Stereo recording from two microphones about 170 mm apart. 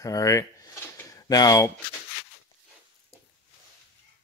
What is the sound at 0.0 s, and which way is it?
Speech, 20° left (ahead or behind).